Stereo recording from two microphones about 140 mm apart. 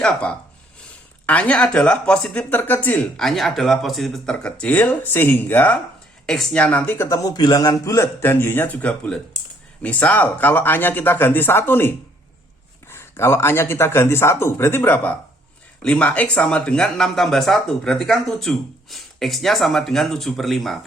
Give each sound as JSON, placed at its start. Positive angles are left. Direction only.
{"t": 0.0, "sound": "speech", "side_deg": 10}
{"t": 6.2, "sound": "speech", "side_deg": 5}